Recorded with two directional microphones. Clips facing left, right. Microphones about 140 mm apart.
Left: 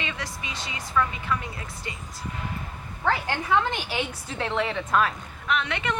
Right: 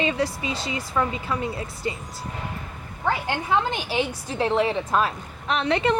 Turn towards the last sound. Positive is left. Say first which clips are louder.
# right 6 dB
turn(degrees=-30)  # may be behind; listen again after turning